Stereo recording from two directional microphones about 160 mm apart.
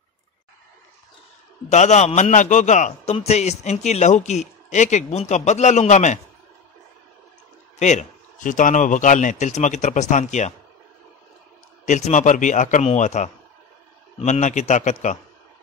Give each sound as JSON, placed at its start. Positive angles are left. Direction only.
{"t": 1.7, "sound": "a man's voice", "side_deg": 45}
{"t": 7.8, "sound": "a man's voice", "side_deg": 50}
{"t": 11.8, "sound": "a man's voice", "side_deg": 50}